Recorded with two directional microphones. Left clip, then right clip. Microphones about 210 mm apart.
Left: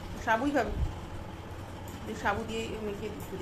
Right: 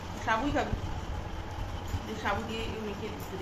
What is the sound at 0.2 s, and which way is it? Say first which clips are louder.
Speech: left 1 dB; 20° left (ahead or behind).